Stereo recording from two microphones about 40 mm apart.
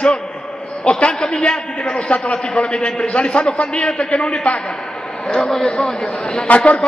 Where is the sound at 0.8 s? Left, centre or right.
Left.